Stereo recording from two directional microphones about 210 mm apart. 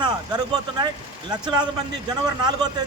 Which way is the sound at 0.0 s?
20° right (ahead or behind).